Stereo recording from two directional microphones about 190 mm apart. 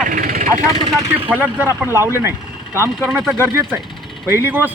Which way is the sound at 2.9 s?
Centre (ahead or behind).